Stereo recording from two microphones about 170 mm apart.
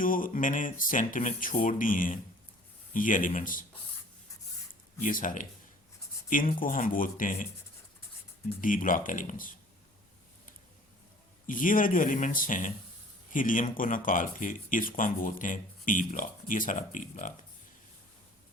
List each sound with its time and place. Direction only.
0.0 s speech: 55° left (ahead or behind)
4.7 s a sound: 50° left (ahead or behind)
6.3 s speech: 55° left (ahead or behind)
8.6 s speech: 50° left (ahead or behind)
11.4 s speech: 50° left (ahead or behind)